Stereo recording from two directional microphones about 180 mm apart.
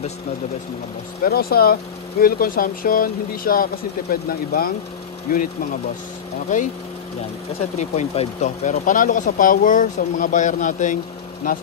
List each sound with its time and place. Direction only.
1.2 s speech: 60° left (ahead or behind)
7.9 s speech: 35° left (ahead or behind)